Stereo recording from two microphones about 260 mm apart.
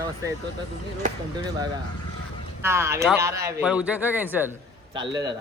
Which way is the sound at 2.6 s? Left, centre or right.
Centre.